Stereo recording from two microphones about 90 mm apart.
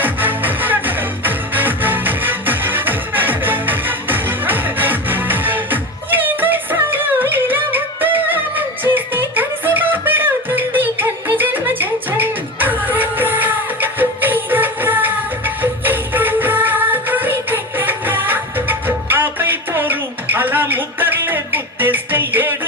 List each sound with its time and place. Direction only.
0.0 s music: 20° right (ahead or behind)